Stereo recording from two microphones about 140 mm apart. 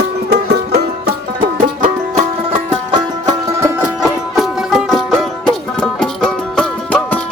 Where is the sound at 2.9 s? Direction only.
30° right (ahead or behind).